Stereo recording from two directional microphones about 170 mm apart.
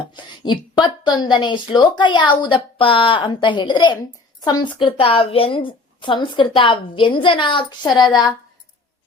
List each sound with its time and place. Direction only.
0.0 s a woman's voice: 25° left (ahead or behind)